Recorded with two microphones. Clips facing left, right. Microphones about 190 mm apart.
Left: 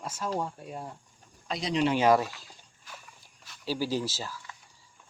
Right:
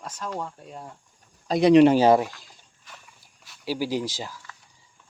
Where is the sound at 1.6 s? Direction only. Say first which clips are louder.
Right 13 dB; 60° right (ahead or behind).